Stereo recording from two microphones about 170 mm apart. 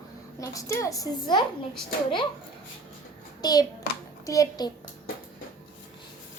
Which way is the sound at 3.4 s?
25° left (ahead or behind).